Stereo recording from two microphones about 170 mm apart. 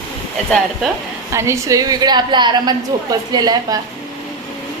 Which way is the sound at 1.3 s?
15° right (ahead or behind).